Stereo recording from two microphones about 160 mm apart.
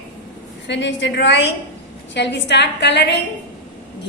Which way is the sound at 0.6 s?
90° left.